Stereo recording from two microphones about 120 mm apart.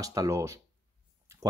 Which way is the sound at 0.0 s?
30° right (ahead or behind).